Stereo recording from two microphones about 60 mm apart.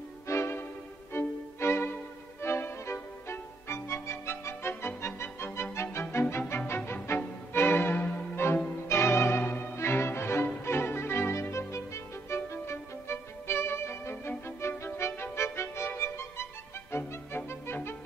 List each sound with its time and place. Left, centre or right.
0.3 s music: left
1.1 s violin: left
2.4 s music: left
7.5 s music: left
9.8 s music: left
12.7 s violin: left
14.4 s music: left